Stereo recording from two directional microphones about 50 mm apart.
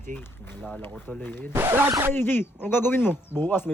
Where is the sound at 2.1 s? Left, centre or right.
Left.